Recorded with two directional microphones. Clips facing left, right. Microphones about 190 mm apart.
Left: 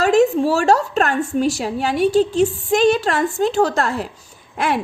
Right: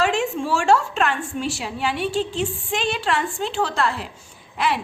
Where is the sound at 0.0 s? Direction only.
40° left (ahead or behind).